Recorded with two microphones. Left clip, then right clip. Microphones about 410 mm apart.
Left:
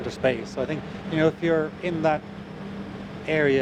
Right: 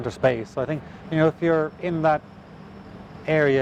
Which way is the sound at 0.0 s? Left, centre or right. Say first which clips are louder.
Right 3 dB; right.